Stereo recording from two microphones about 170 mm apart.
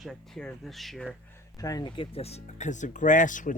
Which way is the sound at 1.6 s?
20° left (ahead or behind).